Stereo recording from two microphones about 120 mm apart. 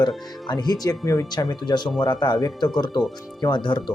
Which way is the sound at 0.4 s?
35° left (ahead or behind).